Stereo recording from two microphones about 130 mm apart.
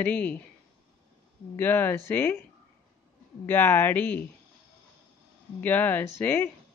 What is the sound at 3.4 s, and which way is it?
Speech, 20° left (ahead or behind).